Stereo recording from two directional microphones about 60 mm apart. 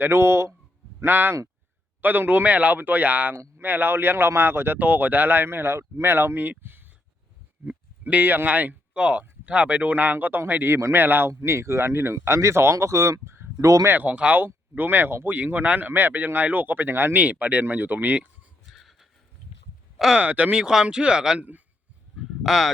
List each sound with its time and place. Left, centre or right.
0.0 s speech: right
0.9 s speech: right
11.3 s speech: right
13.6 s speech: right
13.8 s speech: right
17.2 s speech: right
18.7 s a sound: centre
20.1 s speech: right
22.2 s speech: centre